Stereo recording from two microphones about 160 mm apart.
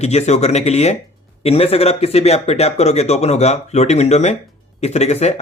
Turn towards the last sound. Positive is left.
turn(degrees=45)  # may be behind; listen again after turning